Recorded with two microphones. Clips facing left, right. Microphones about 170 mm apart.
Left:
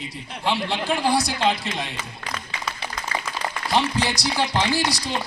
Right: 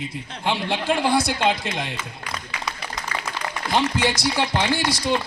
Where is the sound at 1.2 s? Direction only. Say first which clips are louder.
Right 1 dB; 50° right (ahead or behind).